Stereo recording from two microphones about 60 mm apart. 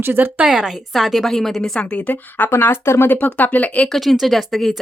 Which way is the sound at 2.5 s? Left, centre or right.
Left.